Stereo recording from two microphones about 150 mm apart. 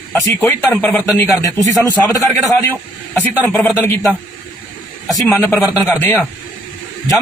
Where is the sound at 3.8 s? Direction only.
15° left (ahead or behind).